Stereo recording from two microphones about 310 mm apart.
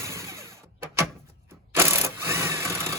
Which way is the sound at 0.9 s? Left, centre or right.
Centre.